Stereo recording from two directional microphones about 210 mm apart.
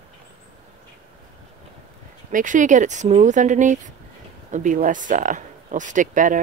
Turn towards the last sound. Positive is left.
turn(degrees=-40)  # may be behind; listen again after turning